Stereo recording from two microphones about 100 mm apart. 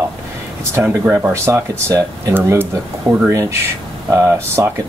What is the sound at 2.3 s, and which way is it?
Speech, 25° right (ahead or behind).